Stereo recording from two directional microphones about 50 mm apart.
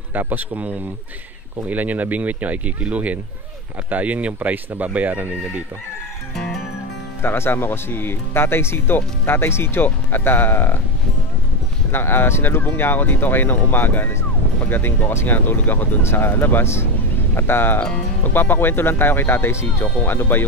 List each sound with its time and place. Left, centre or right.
0.1 s speech: right
7.2 s speech: left
11.9 s speech: left
16.0 s speech: left